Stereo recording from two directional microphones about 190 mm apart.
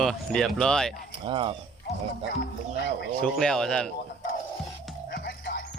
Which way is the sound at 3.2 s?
5° left (ahead or behind).